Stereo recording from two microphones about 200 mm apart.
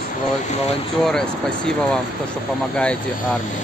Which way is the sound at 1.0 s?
5° left (ahead or behind).